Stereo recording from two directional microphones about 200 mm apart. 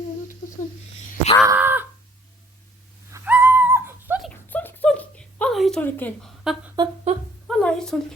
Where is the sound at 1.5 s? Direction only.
10° right (ahead or behind).